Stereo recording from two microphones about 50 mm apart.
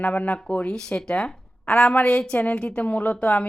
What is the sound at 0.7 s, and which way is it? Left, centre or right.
Speech, centre.